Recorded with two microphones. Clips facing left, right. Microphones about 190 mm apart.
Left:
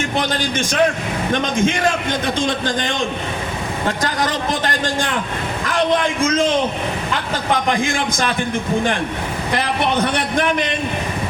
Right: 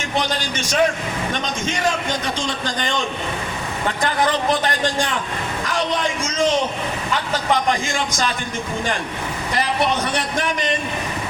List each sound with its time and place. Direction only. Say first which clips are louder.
0.2 s speech: left 1 dB; 55° left (ahead or behind)
5.6 s a man's voice: left 5 dB; 55° left (ahead or behind)
7.7 s a man's voice: left 3 dB; 55° left (ahead or behind)
9.6 s a man's voice: left 1 dB; 60° left (ahead or behind)